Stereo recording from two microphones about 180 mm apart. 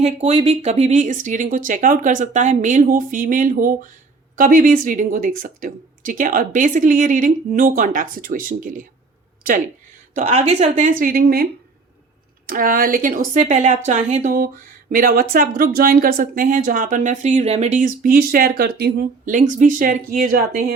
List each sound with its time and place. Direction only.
0.0 s a woman's voice: 35° right (ahead or behind)
10.2 s a woman's voice: 40° right (ahead or behind); by 11.4 s 55° right (ahead or behind)
12.5 s a woman's voice: 50° right (ahead or behind)